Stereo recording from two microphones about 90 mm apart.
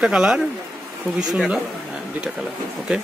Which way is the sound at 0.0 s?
5° right (ahead or behind).